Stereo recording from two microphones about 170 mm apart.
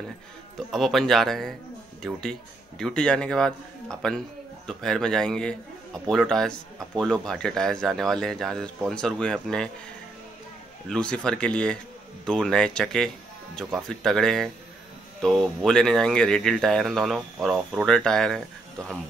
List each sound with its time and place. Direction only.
0.6 s speech: centre (ahead or behind)
10.9 s speech: 5° left (ahead or behind)